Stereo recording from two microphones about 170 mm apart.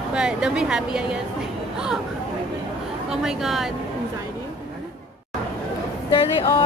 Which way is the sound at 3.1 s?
5° right (ahead or behind).